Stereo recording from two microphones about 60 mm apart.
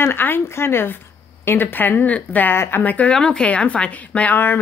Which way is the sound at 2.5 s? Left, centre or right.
Left.